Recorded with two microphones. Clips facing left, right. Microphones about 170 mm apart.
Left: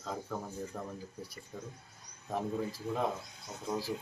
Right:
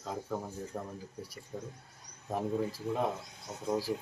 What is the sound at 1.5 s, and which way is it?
Speech, 30° right (ahead or behind).